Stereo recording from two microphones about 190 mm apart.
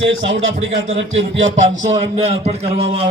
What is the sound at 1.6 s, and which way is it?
Speech, 40° right (ahead or behind).